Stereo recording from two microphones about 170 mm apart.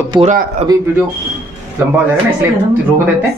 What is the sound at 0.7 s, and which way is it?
Speech, 25° right (ahead or behind).